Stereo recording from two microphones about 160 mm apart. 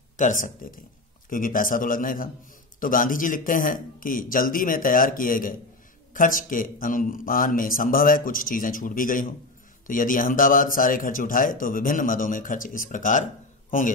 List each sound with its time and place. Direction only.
0.2 s a man's voice: 55° left (ahead or behind)